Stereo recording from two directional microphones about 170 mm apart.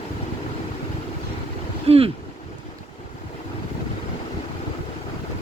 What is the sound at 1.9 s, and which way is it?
Speech, 35° right (ahead or behind).